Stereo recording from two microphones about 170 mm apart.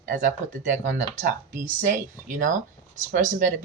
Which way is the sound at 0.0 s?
50° right (ahead or behind).